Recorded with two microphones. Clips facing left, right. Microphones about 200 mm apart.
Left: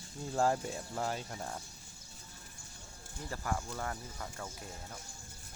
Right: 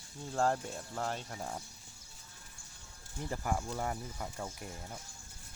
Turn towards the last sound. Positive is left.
turn(degrees=-10)  # may be behind; listen again after turning